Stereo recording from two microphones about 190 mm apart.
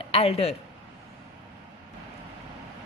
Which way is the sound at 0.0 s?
30° left (ahead or behind).